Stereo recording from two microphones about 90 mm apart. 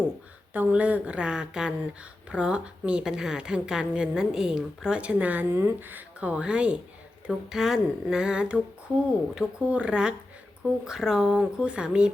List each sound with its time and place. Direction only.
0.5 s a woman's voice: 15° right (ahead or behind)